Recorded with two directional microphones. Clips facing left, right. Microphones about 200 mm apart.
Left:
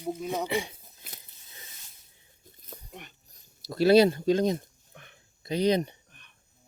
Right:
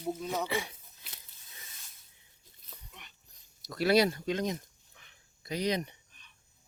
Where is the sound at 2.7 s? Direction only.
50° left (ahead or behind).